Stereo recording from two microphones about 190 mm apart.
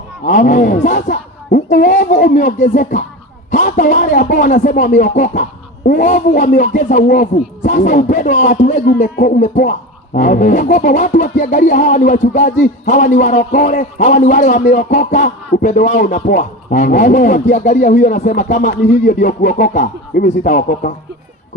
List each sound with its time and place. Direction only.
0.3 s music: 40° left (ahead or behind)
9.2 s speech: 45° left (ahead or behind)
10.2 s music: 45° left (ahead or behind)
19.4 s speech: 45° left (ahead or behind)